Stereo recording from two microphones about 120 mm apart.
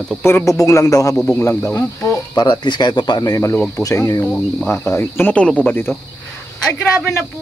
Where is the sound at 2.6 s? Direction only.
40° left (ahead or behind); by 5.9 s 15° left (ahead or behind).